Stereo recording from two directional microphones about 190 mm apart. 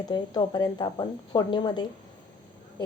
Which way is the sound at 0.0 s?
20° left (ahead or behind).